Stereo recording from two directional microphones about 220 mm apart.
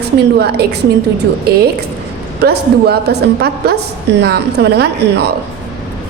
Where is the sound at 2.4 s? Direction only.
45° right (ahead or behind).